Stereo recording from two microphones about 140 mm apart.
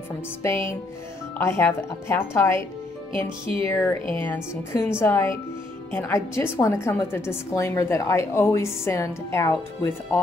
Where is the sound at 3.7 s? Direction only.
20° left (ahead or behind).